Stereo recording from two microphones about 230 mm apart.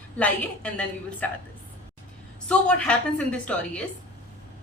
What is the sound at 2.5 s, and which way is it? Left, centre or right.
A woman's voice, centre.